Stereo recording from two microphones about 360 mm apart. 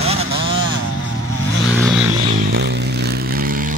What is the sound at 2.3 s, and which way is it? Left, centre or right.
Vehicle, right.